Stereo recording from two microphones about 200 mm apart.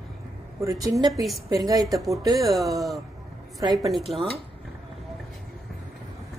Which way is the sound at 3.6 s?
20° right (ahead or behind).